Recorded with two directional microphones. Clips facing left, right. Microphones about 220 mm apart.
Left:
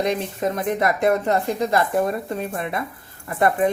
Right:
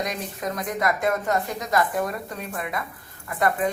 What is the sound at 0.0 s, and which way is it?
Speech, 30° left (ahead or behind).